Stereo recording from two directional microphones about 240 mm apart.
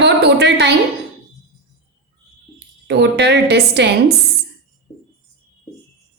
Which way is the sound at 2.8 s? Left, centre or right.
Right.